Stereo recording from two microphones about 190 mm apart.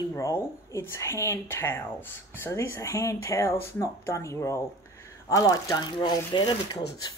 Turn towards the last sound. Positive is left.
turn(degrees=25)  # may be behind; listen again after turning